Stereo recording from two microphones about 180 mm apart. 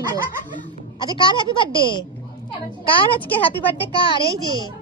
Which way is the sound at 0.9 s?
25° left (ahead or behind).